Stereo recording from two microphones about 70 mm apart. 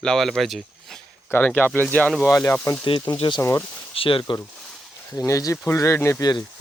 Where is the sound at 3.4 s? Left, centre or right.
Left.